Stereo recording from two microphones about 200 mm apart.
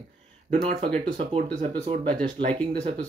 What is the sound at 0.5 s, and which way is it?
Speech, 30° right (ahead or behind).